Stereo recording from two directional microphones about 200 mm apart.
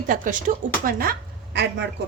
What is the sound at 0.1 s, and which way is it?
A woman's voice, 40° right (ahead or behind).